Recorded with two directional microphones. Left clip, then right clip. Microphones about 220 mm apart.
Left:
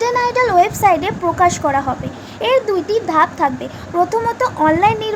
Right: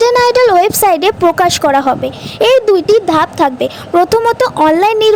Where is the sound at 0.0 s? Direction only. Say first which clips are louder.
Right 7 dB; 45° right (ahead or behind).